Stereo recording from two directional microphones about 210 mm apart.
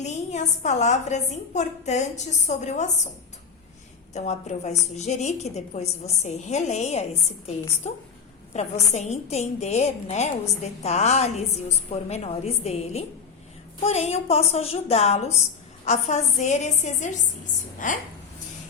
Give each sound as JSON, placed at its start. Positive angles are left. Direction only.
{"t": 0.0, "sound": "a woman's voice", "side_deg": 35}
{"t": 4.1, "sound": "a woman's voice", "side_deg": 35}